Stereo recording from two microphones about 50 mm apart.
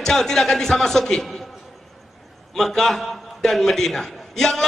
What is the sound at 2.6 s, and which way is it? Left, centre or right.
A man's voice, centre.